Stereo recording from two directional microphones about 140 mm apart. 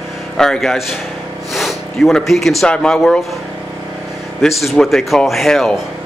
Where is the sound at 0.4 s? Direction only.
Centre (ahead or behind).